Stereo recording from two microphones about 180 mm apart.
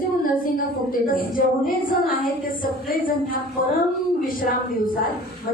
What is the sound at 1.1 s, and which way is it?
A woman's voice, 50° left (ahead or behind).